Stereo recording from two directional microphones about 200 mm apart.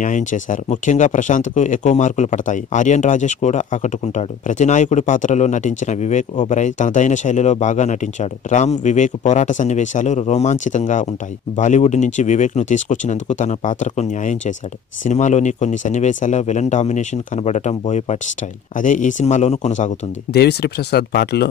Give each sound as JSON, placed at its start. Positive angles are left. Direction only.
{"t": 0.0, "sound": "speech", "side_deg": 40}
{"t": 20.3, "sound": "speech", "side_deg": 55}